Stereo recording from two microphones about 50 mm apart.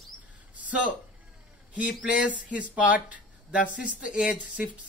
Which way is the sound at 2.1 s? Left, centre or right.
Right.